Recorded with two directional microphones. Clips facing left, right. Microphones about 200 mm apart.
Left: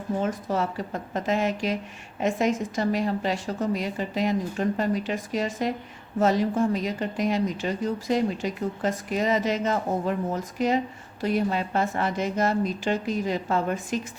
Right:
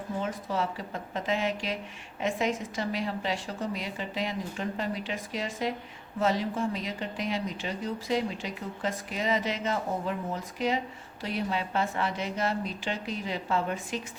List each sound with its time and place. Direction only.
0.2 s a woman's voice: 45° left (ahead or behind)